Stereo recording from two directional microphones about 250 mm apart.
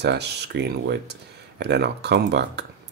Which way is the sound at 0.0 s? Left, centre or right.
Right.